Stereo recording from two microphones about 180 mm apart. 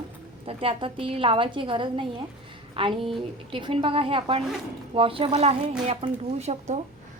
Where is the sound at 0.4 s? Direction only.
30° right (ahead or behind).